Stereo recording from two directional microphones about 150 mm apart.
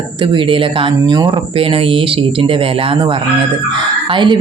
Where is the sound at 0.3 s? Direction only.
35° right (ahead or behind).